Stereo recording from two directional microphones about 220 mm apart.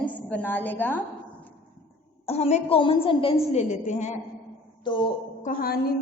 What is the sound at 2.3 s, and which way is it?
A woman's voice, 30° left (ahead or behind).